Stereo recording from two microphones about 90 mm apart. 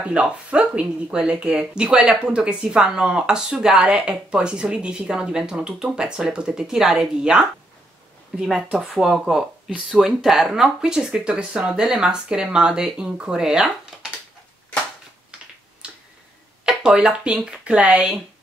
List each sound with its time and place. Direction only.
0.0 s speech: 10° right (ahead or behind)
15.3 s finger snapping: 10° right (ahead or behind)
16.6 s speech: 10° right (ahead or behind)